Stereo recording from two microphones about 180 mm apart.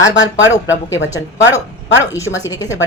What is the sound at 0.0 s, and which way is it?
Speech, 90° left.